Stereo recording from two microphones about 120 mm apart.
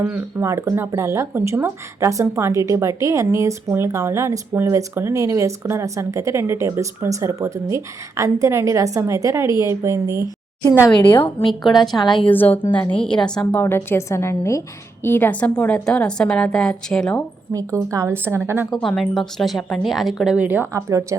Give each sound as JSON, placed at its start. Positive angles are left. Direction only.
{"t": 0.0, "sound": "speech", "side_deg": -20}
{"t": 11.0, "sound": "a woman's voice", "side_deg": 15}
{"t": 11.9, "sound": "a woman's voice", "side_deg": 40}
{"t": 12.3, "sound": "a woman's voice", "side_deg": 15}
{"t": 13.6, "sound": "a woman's voice", "side_deg": 20}
{"t": 17.5, "sound": "speech", "side_deg": -30}
{"t": 18.7, "sound": "speech", "side_deg": 0}
{"t": 20.7, "sound": "speech", "side_deg": -25}